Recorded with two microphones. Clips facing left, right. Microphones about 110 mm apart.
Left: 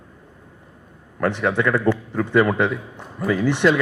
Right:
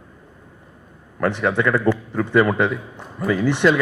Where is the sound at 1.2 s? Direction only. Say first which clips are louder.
Right 1 dB; 25° right (ahead or behind).